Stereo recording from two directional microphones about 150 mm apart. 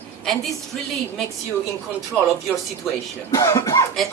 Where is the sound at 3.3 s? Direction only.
20° left (ahead or behind).